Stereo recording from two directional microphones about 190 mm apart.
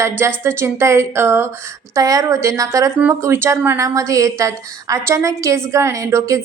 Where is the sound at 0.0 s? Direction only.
10° right (ahead or behind).